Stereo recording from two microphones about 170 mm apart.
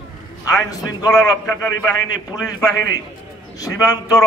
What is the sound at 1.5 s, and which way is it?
Speech, 15° left (ahead or behind).